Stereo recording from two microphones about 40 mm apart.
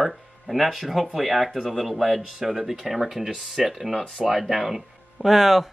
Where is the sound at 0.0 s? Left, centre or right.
Centre.